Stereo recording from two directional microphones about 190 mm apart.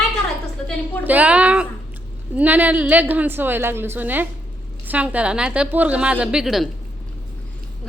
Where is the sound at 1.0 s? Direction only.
10° right (ahead or behind).